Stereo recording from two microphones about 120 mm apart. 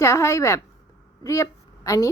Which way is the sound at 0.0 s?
25° left (ahead or behind).